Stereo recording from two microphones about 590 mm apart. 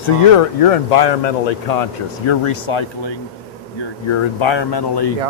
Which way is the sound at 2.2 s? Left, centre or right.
Left.